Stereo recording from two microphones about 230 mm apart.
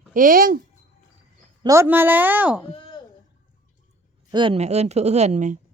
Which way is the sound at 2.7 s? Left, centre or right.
Left.